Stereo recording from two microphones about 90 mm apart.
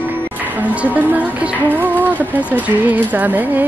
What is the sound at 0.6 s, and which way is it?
Music, 20° right (ahead or behind).